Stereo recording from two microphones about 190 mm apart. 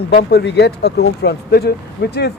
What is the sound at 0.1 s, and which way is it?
Speech, 60° left (ahead or behind).